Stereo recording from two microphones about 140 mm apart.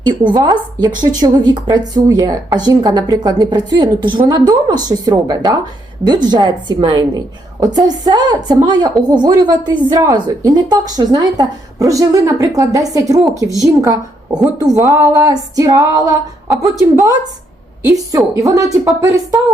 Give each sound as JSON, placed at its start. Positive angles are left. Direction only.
{"t": 0.0, "sound": "a woman's voice", "side_deg": -30}
{"t": 18.3, "sound": "a woman's voice", "side_deg": -20}